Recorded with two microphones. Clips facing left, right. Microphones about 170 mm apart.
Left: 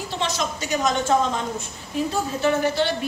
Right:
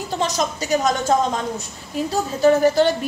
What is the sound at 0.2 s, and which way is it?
Speech, 40° right (ahead or behind).